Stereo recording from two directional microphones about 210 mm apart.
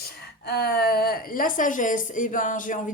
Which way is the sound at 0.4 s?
50° left (ahead or behind).